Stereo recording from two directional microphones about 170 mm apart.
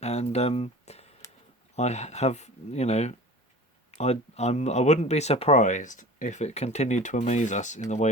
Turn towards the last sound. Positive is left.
turn(degrees=45)  # may be behind; listen again after turning